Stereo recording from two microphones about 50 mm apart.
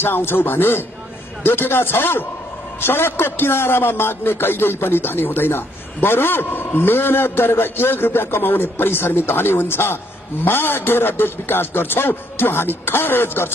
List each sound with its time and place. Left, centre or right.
0.0 s a man's voice: left